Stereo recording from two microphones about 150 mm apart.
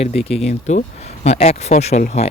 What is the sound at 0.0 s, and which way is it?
Speech, 40° left (ahead or behind).